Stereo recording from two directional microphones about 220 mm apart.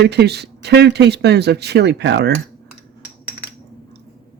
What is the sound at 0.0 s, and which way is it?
Speech, 50° right (ahead or behind).